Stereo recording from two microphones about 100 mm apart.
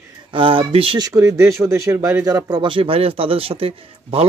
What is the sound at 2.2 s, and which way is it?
A man's voice, 40° right (ahead or behind).